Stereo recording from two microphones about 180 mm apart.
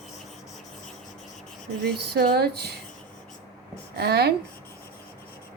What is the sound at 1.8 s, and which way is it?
Speech, 60° right (ahead or behind).